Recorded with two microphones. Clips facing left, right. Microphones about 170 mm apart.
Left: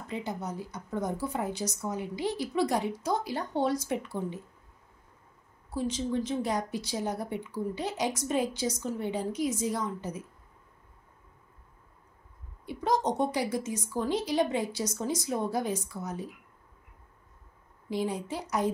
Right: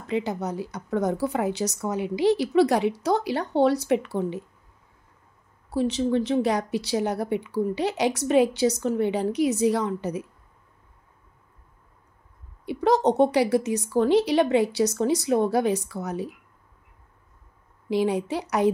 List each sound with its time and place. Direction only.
0.0 s speech: 85° right
5.7 s speech: 70° right (ahead or behind)
12.6 s speech: 70° right (ahead or behind)
17.8 s speech: 75° right (ahead or behind)